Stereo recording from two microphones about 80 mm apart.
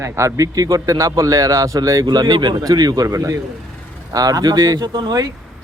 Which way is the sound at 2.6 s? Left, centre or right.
Right.